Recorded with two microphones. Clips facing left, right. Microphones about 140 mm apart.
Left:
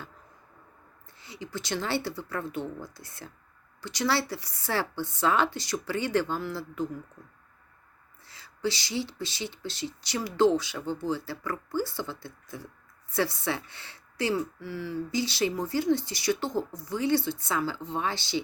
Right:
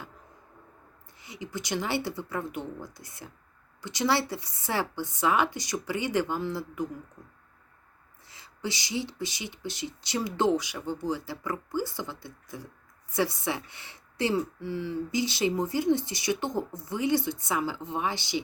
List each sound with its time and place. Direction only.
1.2 s speech: 20° right (ahead or behind)
8.3 s speech: 20° right (ahead or behind)